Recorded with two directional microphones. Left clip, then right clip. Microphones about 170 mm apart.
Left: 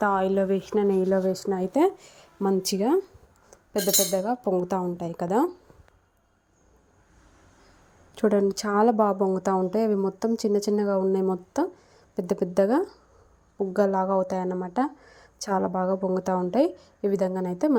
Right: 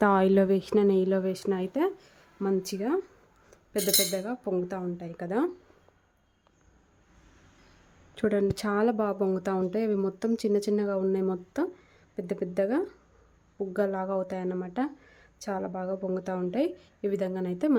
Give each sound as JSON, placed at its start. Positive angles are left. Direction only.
{"t": 0.0, "sound": "speech", "side_deg": -25}
{"t": 1.3, "sound": "speech", "side_deg": 5}
{"t": 1.8, "sound": "speech", "side_deg": 20}
{"t": 3.5, "sound": "cutlery", "side_deg": 5}
{"t": 3.8, "sound": "a woman's voice", "side_deg": -5}
{"t": 8.1, "sound": "a woman's voice", "side_deg": 5}